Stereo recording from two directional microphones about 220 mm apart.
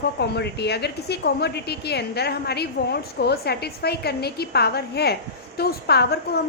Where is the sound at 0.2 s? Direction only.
50° left (ahead or behind).